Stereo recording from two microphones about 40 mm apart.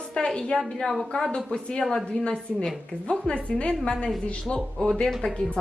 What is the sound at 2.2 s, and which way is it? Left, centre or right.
A woman's voice, left.